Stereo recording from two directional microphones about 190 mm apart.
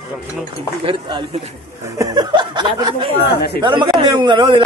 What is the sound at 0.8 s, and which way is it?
A man's voice, 25° right (ahead or behind).